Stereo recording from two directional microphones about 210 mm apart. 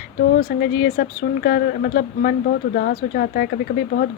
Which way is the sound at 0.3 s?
45° left (ahead or behind).